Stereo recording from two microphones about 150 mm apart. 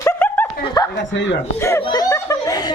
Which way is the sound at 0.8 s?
25° left (ahead or behind).